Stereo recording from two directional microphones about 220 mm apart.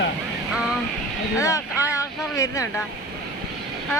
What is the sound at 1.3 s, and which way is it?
Speech, 15° left (ahead or behind).